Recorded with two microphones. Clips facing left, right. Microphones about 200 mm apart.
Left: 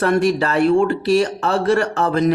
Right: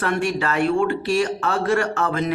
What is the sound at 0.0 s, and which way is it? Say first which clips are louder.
Speech: left 6 dB; 40° left (ahead or behind).